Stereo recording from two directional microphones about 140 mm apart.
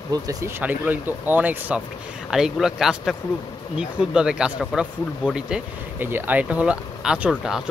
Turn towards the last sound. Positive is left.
turn(degrees=-5)  # may be behind; listen again after turning